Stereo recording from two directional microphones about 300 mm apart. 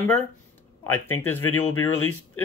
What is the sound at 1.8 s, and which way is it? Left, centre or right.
Speech, left.